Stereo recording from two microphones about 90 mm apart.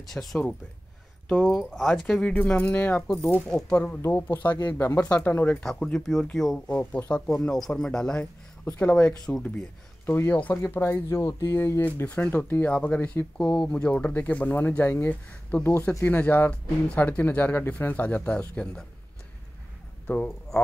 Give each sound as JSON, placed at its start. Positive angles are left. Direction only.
{"t": 0.1, "sound": "speech", "side_deg": 5}
{"t": 3.3, "sound": "speech", "side_deg": 5}
{"t": 3.7, "sound": "speech", "side_deg": 20}
{"t": 5.6, "sound": "speech", "side_deg": 5}
{"t": 6.8, "sound": "speech", "side_deg": 20}
{"t": 10.0, "sound": "speech", "side_deg": 25}
{"t": 20.1, "sound": "speech", "side_deg": 15}